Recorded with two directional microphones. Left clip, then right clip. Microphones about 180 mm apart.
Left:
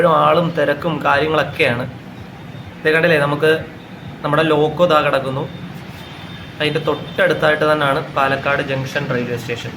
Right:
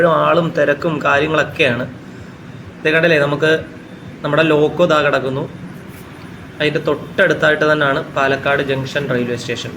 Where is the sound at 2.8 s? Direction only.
Centre (ahead or behind).